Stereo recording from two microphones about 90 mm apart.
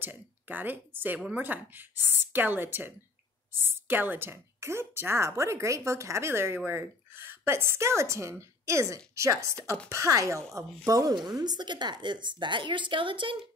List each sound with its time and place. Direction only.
0.0 s a woman's voice: 20° right (ahead or behind); by 13.5 s 65° right (ahead or behind)